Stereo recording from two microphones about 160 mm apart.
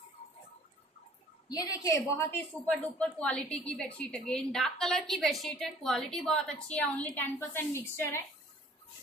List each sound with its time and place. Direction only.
1.5 s a woman's voice: 25° left (ahead or behind)